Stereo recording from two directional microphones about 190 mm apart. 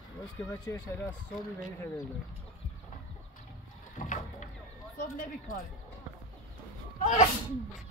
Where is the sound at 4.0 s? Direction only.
40° left (ahead or behind).